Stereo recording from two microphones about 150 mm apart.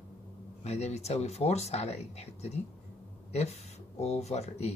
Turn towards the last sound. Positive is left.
turn(degrees=45)  # may be behind; listen again after turning